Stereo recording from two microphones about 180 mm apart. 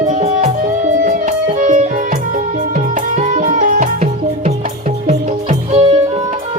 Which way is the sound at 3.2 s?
45° right (ahead or behind).